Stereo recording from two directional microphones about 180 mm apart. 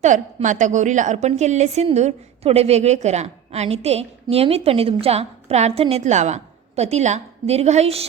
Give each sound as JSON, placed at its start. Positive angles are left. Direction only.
{"t": 0.0, "sound": "a woman's voice", "side_deg": -45}